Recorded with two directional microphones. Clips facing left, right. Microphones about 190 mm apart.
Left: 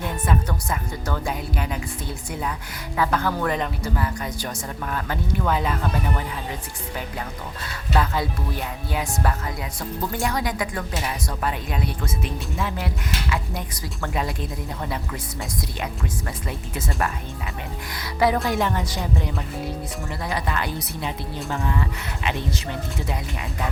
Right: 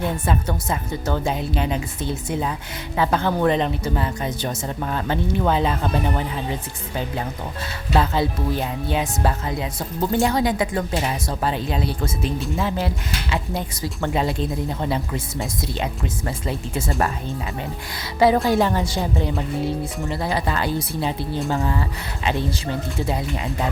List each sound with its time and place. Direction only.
0.3 s speech: 25° right (ahead or behind)
18.2 s speech: 30° right (ahead or behind)